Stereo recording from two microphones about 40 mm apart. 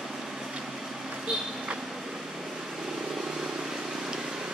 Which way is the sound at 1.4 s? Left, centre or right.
Centre.